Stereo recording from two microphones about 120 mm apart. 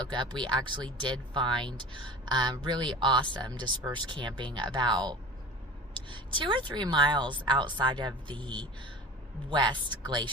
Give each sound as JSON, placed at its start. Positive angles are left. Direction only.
{"t": 0.1, "sound": "speech", "side_deg": -40}
{"t": 9.5, "sound": "speech", "side_deg": -40}